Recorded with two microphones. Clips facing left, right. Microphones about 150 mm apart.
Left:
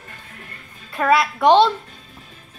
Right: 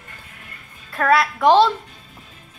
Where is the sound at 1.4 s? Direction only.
20° left (ahead or behind).